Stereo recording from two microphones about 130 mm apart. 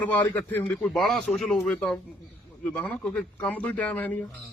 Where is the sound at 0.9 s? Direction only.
5° left (ahead or behind).